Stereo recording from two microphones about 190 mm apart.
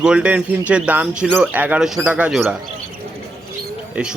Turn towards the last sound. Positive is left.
turn(degrees=-5)  # may be behind; listen again after turning